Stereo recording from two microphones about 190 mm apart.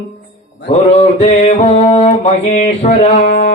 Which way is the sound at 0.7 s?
35° left (ahead or behind).